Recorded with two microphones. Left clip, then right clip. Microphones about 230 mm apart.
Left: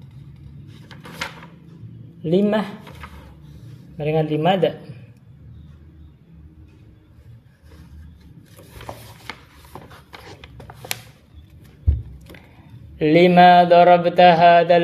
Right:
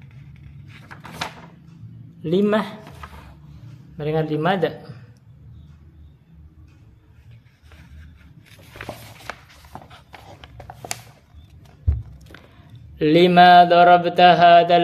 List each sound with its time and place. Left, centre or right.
2.2 s a man's voice: centre
4.0 s mantra: centre
12.9 s speech: centre
13.4 s mantra: centre